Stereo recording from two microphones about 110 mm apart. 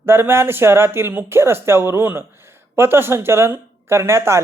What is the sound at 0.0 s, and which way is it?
A man's voice, 20° right (ahead or behind).